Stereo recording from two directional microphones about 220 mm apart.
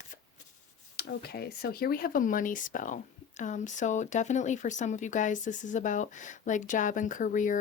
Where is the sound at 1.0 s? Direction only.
45° left (ahead or behind).